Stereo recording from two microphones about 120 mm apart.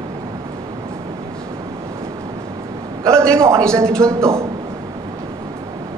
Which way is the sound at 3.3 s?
25° right (ahead or behind).